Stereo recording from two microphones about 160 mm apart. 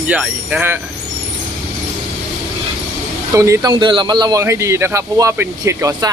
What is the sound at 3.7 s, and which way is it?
A man's voice, 30° right (ahead or behind).